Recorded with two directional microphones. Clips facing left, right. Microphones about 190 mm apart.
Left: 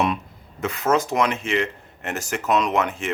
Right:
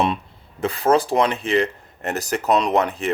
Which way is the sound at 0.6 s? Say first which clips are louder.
Right 3 dB; 35° right (ahead or behind).